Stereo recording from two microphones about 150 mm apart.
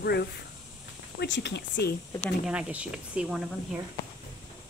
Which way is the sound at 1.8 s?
90° left.